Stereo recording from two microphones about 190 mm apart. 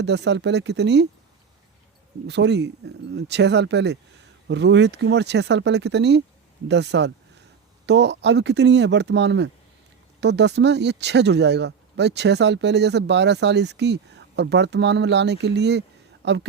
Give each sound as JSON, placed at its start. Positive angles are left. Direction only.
{"t": 0.0, "sound": "speech", "side_deg": -65}
{"t": 2.2, "sound": "a woman's voice", "side_deg": -65}